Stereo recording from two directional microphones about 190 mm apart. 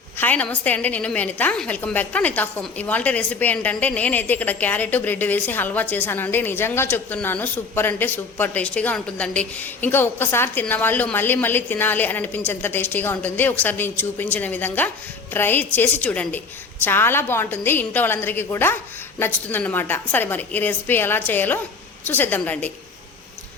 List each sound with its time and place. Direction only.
0.2 s a woman's voice: 10° left (ahead or behind)